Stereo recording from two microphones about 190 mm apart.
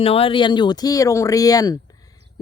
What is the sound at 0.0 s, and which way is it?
Speech, 30° left (ahead or behind).